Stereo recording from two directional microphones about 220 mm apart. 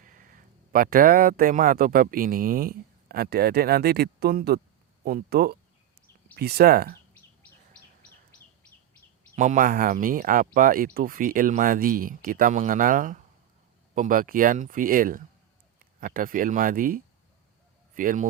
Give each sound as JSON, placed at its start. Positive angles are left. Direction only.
{"t": 0.0, "sound": "speech", "side_deg": -40}
{"t": 9.3, "sound": "speech", "side_deg": -35}